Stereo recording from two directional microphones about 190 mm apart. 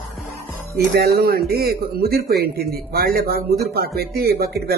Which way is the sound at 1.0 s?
55° right (ahead or behind).